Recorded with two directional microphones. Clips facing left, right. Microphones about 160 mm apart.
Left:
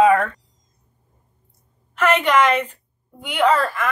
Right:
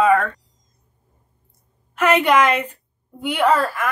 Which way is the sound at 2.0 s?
10° right (ahead or behind).